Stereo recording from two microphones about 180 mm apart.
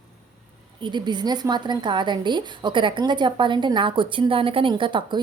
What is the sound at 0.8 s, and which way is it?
Speech, 25° right (ahead or behind).